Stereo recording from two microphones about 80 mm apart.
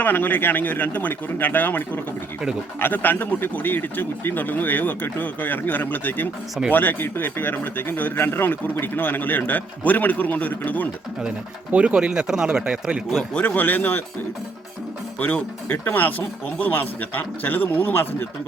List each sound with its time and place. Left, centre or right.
0.0 s speech: left
11.2 s speech: centre
13.4 s speech: left
15.2 s speech: left